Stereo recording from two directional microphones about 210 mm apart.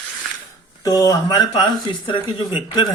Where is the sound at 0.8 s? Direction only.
15° left (ahead or behind).